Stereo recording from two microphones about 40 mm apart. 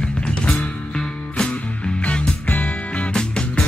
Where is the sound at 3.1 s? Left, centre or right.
Left.